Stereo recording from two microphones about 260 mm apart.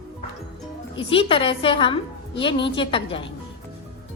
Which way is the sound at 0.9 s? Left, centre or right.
Centre.